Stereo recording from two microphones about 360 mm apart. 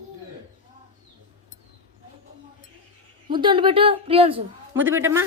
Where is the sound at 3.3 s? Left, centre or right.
Centre.